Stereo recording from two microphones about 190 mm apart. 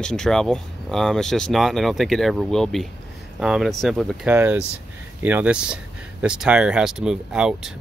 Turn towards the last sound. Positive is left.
turn(degrees=-5)  # may be behind; listen again after turning